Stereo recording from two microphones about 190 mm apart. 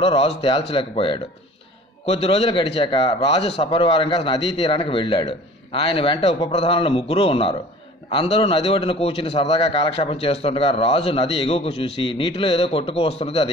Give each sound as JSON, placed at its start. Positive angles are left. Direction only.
{"t": 0.0, "sound": "a man's voice", "side_deg": 30}